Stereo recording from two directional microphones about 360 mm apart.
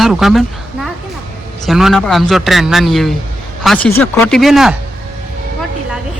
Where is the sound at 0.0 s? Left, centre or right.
Centre.